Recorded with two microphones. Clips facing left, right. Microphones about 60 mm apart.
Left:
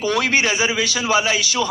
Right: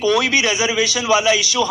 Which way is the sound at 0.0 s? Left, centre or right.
Left.